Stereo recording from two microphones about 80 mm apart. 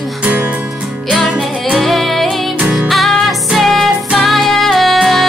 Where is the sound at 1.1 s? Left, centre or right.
Centre.